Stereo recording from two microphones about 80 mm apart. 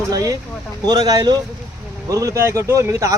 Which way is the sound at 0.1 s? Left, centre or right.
Right.